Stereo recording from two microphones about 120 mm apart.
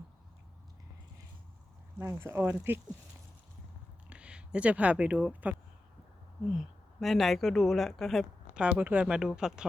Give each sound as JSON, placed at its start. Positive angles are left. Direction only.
{"t": 2.0, "sound": "speech", "side_deg": -20}
{"t": 4.1, "sound": "speech", "side_deg": -10}
{"t": 6.5, "sound": "a woman's voice", "side_deg": 0}
{"t": 8.5, "sound": "speech", "side_deg": -10}